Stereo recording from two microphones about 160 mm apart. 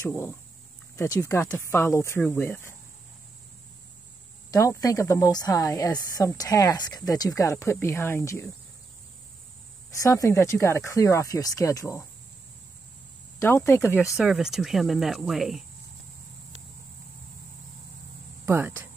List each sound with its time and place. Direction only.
0.0 s speech: 15° left (ahead or behind)
4.5 s speech: 20° left (ahead or behind)
9.8 s speech: 20° left (ahead or behind)
13.4 s speech: 15° left (ahead or behind)
14.1 s speech: 5° right (ahead or behind)
18.4 s a sound: 15° right (ahead or behind)